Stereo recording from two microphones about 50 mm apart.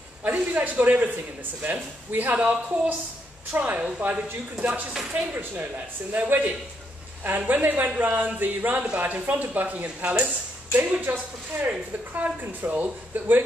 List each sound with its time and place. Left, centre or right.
0.2 s a man's voice: right
4.9 s speech: centre
5.3 s speech: right
6.1 s a man's voice: right